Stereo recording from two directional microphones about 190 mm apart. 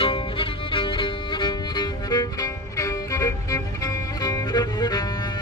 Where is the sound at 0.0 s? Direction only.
25° left (ahead or behind).